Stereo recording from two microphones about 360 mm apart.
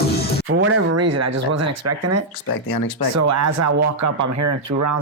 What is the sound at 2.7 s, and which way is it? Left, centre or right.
Speech, left.